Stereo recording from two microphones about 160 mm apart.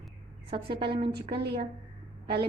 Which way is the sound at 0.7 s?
90° right.